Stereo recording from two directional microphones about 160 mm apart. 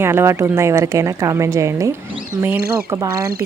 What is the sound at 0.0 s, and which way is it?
Speech, 15° right (ahead or behind).